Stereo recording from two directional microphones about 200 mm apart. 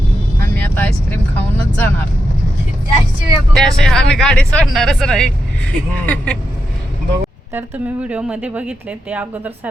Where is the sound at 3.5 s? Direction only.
Centre (ahead or behind).